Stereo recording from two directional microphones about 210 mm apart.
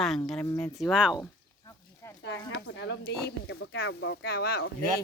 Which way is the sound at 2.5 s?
60° left (ahead or behind).